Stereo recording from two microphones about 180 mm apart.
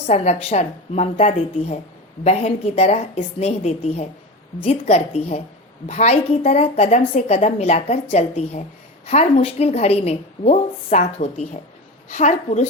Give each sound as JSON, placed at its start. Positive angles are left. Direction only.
{"t": 0.1, "sound": "a woman's voice", "side_deg": 35}